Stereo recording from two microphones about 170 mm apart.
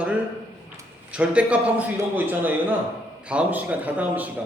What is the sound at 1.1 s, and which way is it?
Speech, 5° right (ahead or behind).